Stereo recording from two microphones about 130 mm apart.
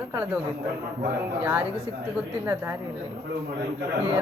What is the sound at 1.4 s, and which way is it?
Speech, 10° right (ahead or behind).